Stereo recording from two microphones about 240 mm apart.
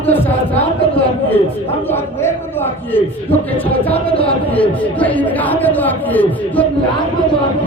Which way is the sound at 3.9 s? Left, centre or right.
Left.